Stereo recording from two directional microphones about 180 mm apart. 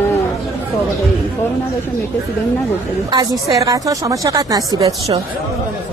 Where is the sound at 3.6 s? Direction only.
20° right (ahead or behind).